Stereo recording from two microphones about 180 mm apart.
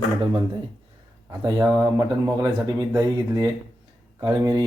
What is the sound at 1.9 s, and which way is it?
Speech, 20° right (ahead or behind).